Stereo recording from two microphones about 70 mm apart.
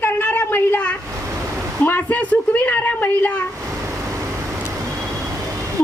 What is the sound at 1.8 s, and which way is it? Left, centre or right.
Speech, left.